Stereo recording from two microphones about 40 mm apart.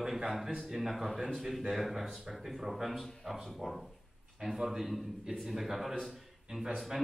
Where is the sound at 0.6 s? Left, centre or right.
Centre.